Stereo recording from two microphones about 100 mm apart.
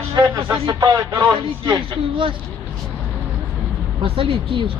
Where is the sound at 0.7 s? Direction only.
35° right (ahead or behind).